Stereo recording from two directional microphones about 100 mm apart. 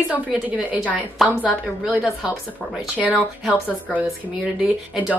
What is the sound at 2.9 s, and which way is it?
Speech, 10° right (ahead or behind).